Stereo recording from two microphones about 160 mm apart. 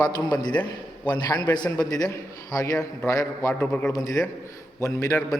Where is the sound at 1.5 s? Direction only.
25° left (ahead or behind).